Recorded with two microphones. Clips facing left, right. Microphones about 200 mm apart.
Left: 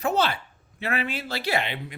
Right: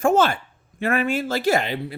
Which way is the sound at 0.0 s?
50° right (ahead or behind).